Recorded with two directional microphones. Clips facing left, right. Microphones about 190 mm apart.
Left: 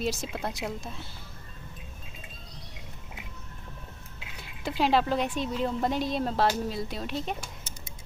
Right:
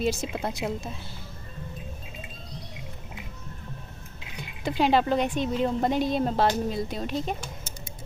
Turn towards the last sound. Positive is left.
turn(degrees=0)  # may be behind; listen again after turning